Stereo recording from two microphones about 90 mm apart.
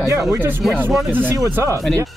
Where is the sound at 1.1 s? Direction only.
20° right (ahead or behind).